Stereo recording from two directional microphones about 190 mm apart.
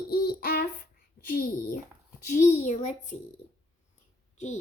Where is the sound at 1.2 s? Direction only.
50° left (ahead or behind).